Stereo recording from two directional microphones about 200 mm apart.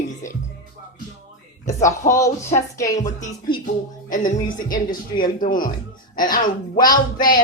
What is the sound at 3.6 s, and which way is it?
Speech, 45° left (ahead or behind).